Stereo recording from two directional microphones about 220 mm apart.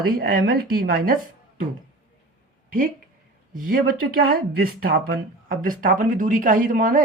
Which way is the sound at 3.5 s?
40° right (ahead or behind).